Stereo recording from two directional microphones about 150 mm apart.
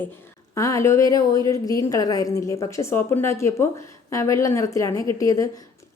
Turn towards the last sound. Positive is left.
turn(degrees=25)  # may be behind; listen again after turning